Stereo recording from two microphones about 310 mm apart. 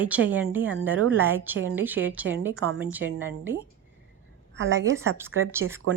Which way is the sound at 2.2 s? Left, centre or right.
Right.